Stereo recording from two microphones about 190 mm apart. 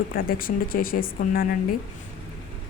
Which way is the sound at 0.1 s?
50° left (ahead or behind).